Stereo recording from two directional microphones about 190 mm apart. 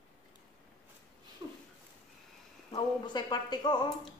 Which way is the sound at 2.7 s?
25° left (ahead or behind).